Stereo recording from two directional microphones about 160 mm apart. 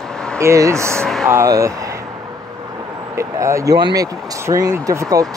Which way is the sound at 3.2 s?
20° right (ahead or behind).